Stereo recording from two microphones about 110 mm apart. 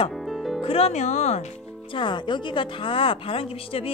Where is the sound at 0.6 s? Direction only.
60° left (ahead or behind); by 1.4 s 90° left.